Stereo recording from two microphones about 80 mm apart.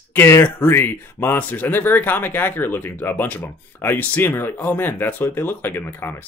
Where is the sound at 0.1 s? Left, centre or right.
Left.